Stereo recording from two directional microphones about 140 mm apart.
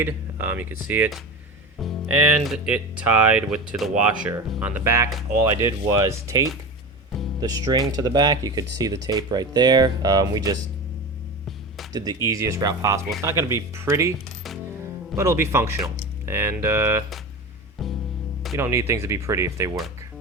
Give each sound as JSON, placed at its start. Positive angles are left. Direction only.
{"t": 0.0, "sound": "speech", "side_deg": -15}
{"t": 1.8, "sound": "speech", "side_deg": 0}
{"t": 11.9, "sound": "speech", "side_deg": -25}
{"t": 15.1, "sound": "speech", "side_deg": -20}
{"t": 17.8, "sound": "music", "side_deg": 0}
{"t": 18.5, "sound": "speech", "side_deg": -20}